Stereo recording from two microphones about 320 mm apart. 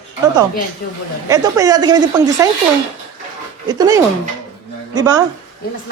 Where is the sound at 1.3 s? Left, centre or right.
Centre.